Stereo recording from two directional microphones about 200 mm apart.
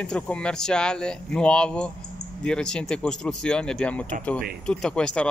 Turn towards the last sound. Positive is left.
turn(degrees=5)  # may be behind; listen again after turning